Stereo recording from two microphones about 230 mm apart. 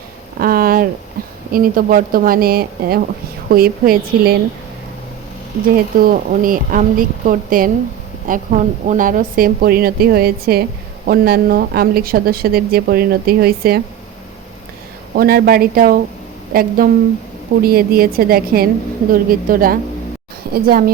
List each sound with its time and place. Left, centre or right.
0.3 s a sound: right
1.5 s a woman's voice: right
5.7 s a woman's voice: right
15.1 s a woman's voice: right